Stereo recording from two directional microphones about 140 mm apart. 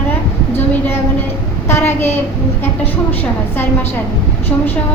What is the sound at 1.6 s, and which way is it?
Speech, 15° left (ahead or behind).